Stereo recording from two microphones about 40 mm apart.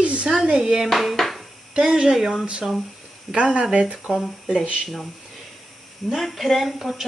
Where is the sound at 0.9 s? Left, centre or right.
Centre.